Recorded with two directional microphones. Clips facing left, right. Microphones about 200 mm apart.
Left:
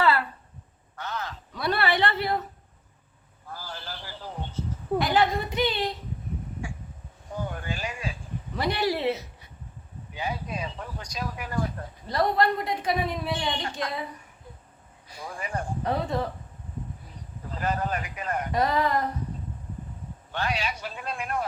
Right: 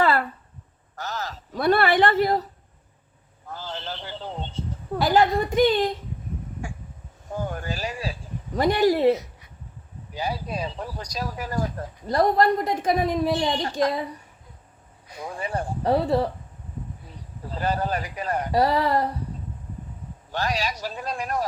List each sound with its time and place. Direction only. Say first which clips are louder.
0.0 s a sound: right 2 dB; 50° right (ahead or behind)
3.5 s a sound: right 5 dB; 25° right (ahead or behind)
4.9 s a woman's voice: right 4 dB; 45° right (ahead or behind)
7.4 s a sound: right 3 dB; 40° right (ahead or behind)
8.5 s a woman's voice: right 7 dB; 45° right (ahead or behind)
10.2 s speech: right 3 dB; 35° right (ahead or behind)
15.4 s speech: right 3 dB; 30° right (ahead or behind)
17.5 s speech: right 3 dB; 30° right (ahead or behind)
20.3 s speech: right 3 dB; 40° right (ahead or behind)